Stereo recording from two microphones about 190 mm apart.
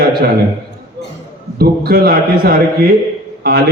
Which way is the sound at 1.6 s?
55° right (ahead or behind).